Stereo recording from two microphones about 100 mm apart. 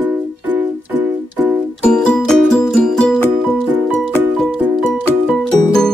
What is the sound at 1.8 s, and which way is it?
Music, 10° left (ahead or behind).